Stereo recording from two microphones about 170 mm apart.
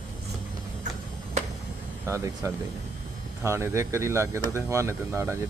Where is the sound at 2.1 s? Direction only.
15° right (ahead or behind).